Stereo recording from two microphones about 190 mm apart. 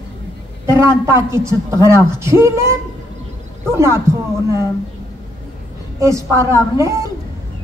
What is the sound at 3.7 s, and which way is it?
Speech, 15° right (ahead or behind).